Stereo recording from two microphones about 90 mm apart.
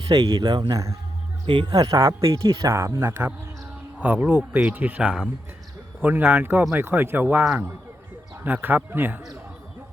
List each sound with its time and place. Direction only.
0.2 s speech: 45° right (ahead or behind)
0.7 s speech: 35° right (ahead or behind)
1.5 s speech: 55° right (ahead or behind)
1.9 s speech: 35° right (ahead or behind)
3.9 s speech: 15° right (ahead or behind)
8.4 s speech: 20° right (ahead or behind)